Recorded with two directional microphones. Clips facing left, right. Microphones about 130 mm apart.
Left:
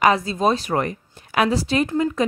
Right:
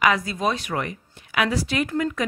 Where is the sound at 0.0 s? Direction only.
30° left (ahead or behind).